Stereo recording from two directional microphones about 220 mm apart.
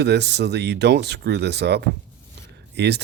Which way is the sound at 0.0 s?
50° right (ahead or behind).